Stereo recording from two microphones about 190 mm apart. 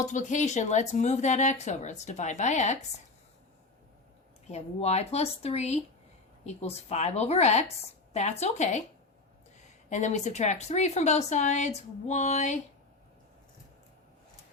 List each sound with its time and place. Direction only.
0.0 s a woman's voice: 40° left (ahead or behind)
4.5 s a woman's voice: 35° left (ahead or behind)
9.9 s a woman's voice: 40° left (ahead or behind)